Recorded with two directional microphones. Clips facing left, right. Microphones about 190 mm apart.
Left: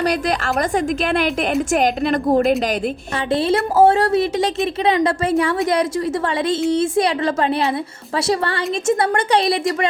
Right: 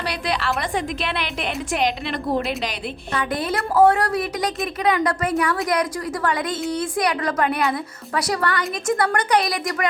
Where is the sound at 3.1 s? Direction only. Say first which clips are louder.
Left 6 dB; 25° left (ahead or behind).